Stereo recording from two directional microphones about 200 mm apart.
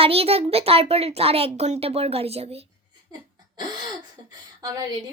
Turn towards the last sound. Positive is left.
turn(degrees=-20)  # may be behind; listen again after turning